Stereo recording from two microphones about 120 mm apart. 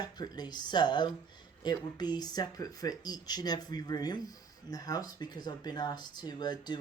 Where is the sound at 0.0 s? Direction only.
35° left (ahead or behind).